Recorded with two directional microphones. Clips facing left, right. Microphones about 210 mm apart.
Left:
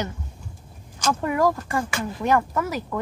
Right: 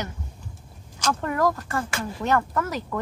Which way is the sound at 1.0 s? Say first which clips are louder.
Left 2 dB; 10° left (ahead or behind).